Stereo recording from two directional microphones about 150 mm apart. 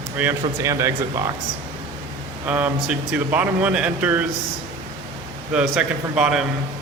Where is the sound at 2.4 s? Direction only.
10° right (ahead or behind).